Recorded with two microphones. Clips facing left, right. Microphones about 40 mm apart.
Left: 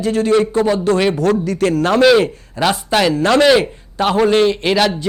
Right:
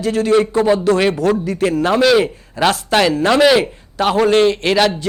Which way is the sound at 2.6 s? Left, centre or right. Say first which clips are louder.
Right 1 dB; centre.